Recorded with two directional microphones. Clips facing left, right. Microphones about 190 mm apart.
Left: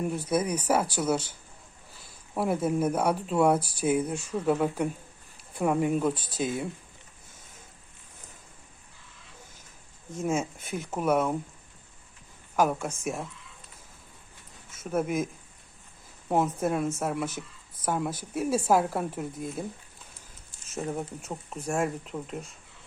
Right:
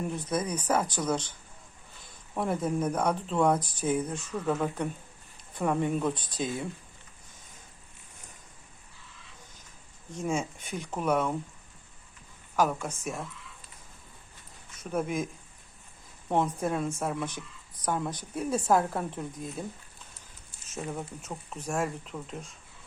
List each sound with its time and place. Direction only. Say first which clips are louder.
0.0 s speech: left 3 dB; 10° left (ahead or behind)
10.2 s speech: left 2 dB; 5° left (ahead or behind)
12.5 s speech: left 2 dB; 10° left (ahead or behind)
14.8 s speech: left 3 dB; 5° left (ahead or behind)
16.3 s speech: left 2 dB; 5° left (ahead or behind)
20.7 s speech: left 4 dB; 10° left (ahead or behind)